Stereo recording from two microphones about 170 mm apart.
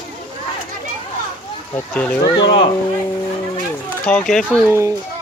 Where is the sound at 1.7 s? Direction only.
10° left (ahead or behind).